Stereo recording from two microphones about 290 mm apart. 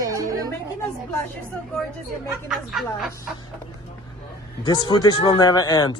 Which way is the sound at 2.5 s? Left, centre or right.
Centre.